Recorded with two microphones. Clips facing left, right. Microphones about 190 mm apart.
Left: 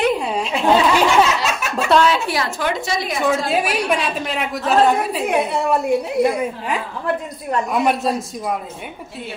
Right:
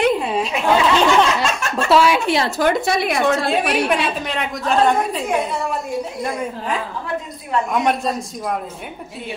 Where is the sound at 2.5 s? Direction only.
40° right (ahead or behind).